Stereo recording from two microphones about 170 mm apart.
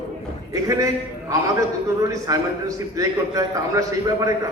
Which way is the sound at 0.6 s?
20° right (ahead or behind).